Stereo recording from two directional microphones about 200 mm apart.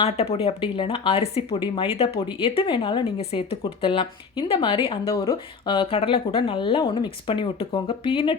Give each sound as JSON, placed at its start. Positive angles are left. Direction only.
{"t": 0.0, "sound": "speech", "side_deg": 30}